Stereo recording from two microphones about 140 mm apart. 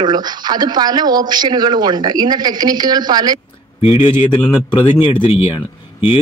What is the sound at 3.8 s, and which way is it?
A man's voice, 40° left (ahead or behind).